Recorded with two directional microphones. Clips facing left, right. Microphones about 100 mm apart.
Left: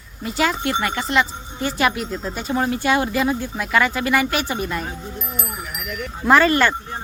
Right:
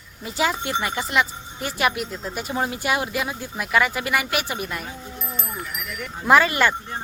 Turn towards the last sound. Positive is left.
turn(degrees=-10)  # may be behind; listen again after turning